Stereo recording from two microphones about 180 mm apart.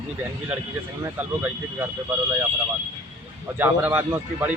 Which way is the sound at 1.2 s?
10° right (ahead or behind).